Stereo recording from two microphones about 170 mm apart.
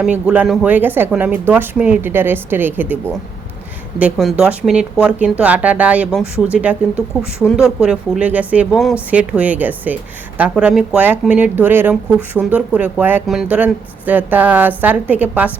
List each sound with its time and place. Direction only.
0.0 s speech: 10° right (ahead or behind)
6.9 s speech: 15° left (ahead or behind)
7.5 s speech: 5° right (ahead or behind)